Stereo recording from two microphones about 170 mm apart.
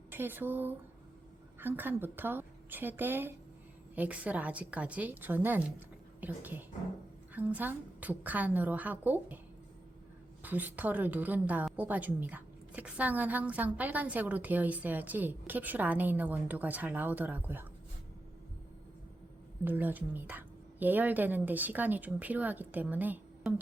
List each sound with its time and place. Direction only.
0.1 s a woman's voice: 10° right (ahead or behind)
10.4 s a woman's voice: 10° right (ahead or behind)
19.6 s a woman's voice: 10° right (ahead or behind)